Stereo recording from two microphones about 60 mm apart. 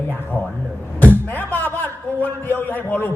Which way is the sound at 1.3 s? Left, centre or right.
Left.